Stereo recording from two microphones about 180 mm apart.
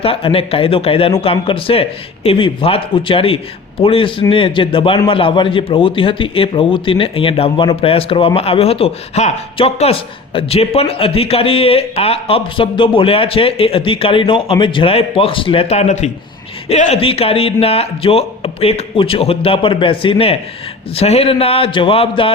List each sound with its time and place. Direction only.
0.0 s speech: 30° left (ahead or behind)